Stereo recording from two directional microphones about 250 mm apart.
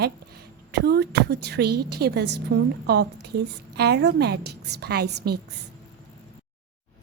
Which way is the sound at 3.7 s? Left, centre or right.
Right.